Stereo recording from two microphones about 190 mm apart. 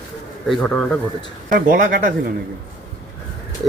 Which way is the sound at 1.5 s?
45° right (ahead or behind).